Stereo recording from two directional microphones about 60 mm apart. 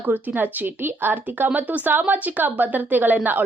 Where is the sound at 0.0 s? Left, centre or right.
Right.